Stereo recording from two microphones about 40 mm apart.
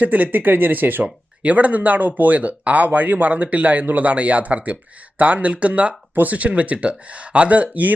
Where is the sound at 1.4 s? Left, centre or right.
Right.